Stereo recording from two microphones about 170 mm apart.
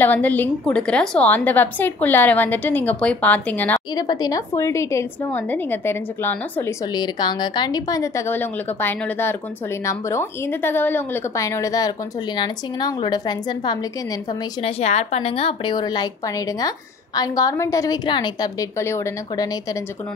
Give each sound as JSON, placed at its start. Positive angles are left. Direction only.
{"t": 0.0, "sound": "a woman's voice", "side_deg": 10}
{"t": 3.9, "sound": "a woman's voice", "side_deg": 20}
{"t": 6.9, "sound": "a woman's voice", "side_deg": 25}
{"t": 14.6, "sound": "a woman's voice", "side_deg": 40}